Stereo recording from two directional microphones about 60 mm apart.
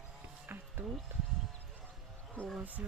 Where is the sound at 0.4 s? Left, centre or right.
Right.